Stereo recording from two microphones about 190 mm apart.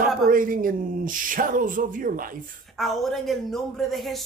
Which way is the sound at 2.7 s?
Centre (ahead or behind).